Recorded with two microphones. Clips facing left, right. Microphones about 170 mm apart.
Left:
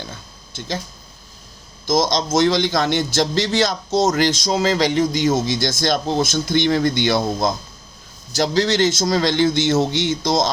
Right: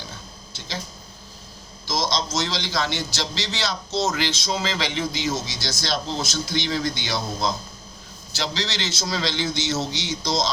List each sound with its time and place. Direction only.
1.9 s a man's voice: 50° left (ahead or behind)